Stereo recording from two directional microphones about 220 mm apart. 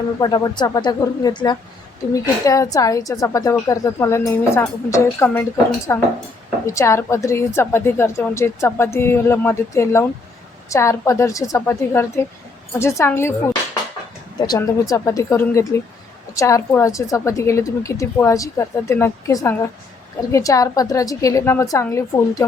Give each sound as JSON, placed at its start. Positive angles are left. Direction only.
{"t": 0.2, "sound": "a woman's voice", "side_deg": 15}
{"t": 14.4, "sound": "a woman's voice", "side_deg": 15}